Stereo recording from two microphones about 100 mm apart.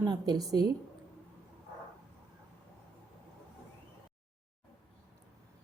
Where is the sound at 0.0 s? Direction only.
40° right (ahead or behind).